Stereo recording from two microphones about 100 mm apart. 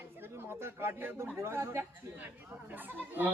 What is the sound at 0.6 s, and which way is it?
A man's voice, 25° right (ahead or behind).